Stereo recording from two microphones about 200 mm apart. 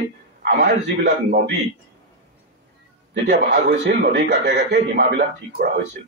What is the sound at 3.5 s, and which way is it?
A man's voice, 65° right (ahead or behind).